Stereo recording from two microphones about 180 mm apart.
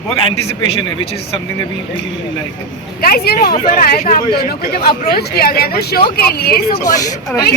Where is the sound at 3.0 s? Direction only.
60° left (ahead or behind).